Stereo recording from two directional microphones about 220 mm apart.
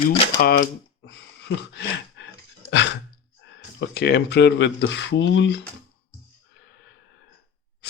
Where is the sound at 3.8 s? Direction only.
50° left (ahead or behind).